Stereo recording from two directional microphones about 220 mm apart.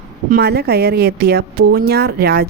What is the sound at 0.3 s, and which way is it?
A woman's voice, 45° right (ahead or behind).